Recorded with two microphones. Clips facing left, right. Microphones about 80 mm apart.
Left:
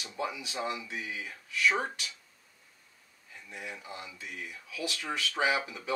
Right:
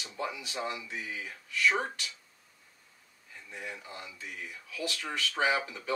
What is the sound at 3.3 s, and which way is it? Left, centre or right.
Speech, centre.